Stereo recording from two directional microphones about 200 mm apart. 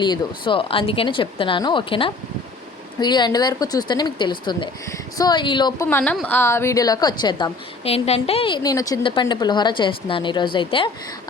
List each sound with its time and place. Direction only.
0.0 s a woman's voice: 25° left (ahead or behind)
5.9 s a woman's voice: 5° left (ahead or behind); by 10.9 s 25° left (ahead or behind)